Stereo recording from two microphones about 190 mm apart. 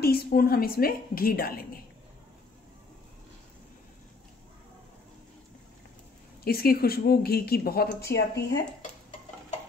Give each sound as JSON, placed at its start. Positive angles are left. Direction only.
{"t": 0.0, "sound": "a woman's voice", "side_deg": 50}
{"t": 6.4, "sound": "a woman's voice", "side_deg": 55}